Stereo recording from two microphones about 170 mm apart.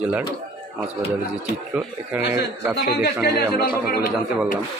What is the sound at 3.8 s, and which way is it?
Speech, 60° left (ahead or behind).